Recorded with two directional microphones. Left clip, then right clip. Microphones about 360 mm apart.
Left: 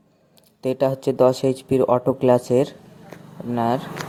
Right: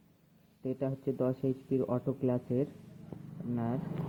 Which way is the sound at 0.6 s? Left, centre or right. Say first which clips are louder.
Left 15 dB; left.